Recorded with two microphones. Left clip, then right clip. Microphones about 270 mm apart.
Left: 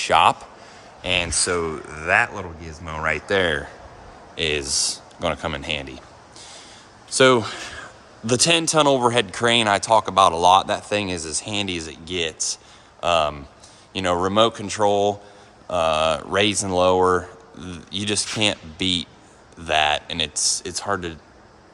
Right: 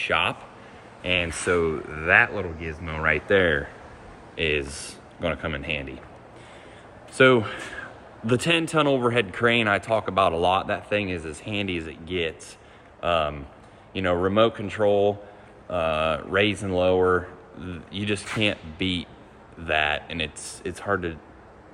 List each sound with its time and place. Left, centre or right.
0.0 s a man's voice: left
1.0 s speech: centre
7.1 s speech: centre